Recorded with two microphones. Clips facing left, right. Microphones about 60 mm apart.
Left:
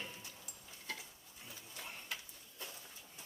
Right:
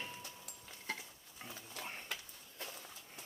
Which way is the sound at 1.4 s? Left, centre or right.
Right.